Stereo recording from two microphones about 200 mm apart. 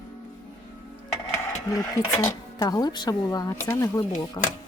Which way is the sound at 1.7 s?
15° left (ahead or behind).